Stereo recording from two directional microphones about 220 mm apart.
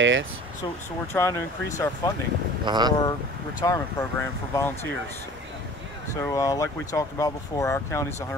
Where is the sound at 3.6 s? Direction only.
15° left (ahead or behind).